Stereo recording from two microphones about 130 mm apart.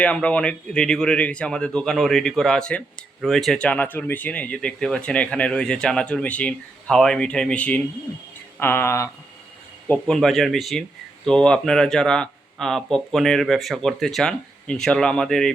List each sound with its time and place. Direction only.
0.0 s speech: 10° left (ahead or behind)
9.9 s speech: 5° left (ahead or behind)